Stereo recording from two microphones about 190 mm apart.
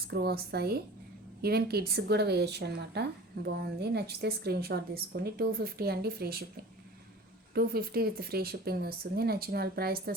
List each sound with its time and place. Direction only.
0.1 s speech: 55° right (ahead or behind)
7.5 s speech: 55° right (ahead or behind)